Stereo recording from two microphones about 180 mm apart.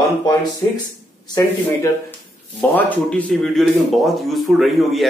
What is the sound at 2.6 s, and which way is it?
A man's voice, 10° left (ahead or behind).